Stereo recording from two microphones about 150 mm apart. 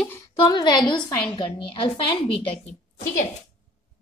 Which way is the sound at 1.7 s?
35° left (ahead or behind).